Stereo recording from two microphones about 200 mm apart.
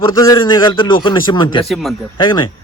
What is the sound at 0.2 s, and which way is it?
A man's voice, 20° left (ahead or behind).